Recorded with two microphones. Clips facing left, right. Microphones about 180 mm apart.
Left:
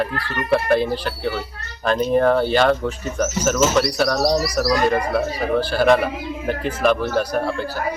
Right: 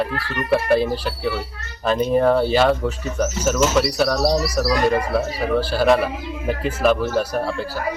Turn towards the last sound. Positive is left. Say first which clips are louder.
# left 1 dB
turn(degrees=-5)  # may be behind; listen again after turning